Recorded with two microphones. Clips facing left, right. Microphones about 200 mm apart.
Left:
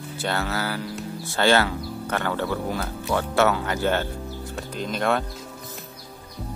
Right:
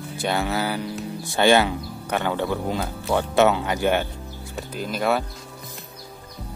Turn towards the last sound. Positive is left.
turn(degrees=-5)  # may be behind; listen again after turning